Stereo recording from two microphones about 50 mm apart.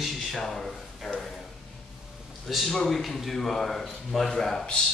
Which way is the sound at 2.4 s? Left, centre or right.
Centre.